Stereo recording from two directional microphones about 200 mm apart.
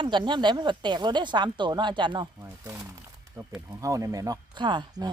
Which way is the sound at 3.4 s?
20° right (ahead or behind).